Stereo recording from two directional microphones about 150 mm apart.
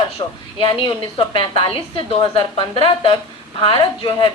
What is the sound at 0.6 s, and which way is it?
A woman's voice, 35° left (ahead or behind).